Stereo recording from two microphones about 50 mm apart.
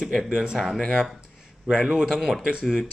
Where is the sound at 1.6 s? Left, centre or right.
Centre.